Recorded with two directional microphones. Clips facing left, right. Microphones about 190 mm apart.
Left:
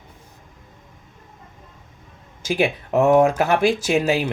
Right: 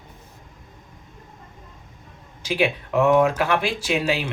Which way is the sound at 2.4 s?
45° left (ahead or behind).